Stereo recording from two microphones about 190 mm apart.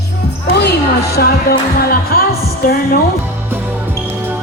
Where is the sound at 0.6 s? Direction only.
60° left (ahead or behind).